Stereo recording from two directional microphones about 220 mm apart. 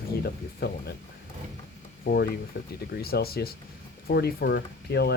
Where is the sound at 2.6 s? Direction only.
50° left (ahead or behind).